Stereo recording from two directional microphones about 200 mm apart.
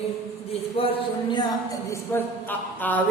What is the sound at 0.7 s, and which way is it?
Speech, 30° left (ahead or behind).